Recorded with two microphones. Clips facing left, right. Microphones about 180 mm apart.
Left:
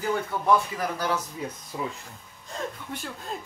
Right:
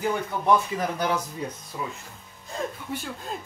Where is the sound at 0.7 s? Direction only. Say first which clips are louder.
Right 2 dB; 20° right (ahead or behind).